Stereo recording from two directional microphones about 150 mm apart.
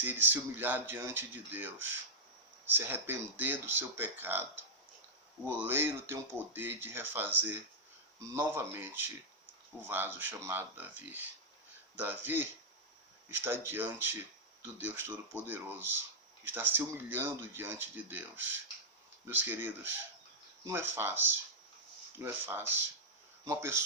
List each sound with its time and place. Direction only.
0.0 s speech: 15° right (ahead or behind)
19.5 s speech: 15° right (ahead or behind)